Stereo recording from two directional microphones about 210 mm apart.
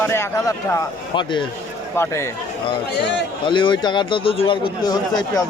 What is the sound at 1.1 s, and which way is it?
Speech, 20° left (ahead or behind).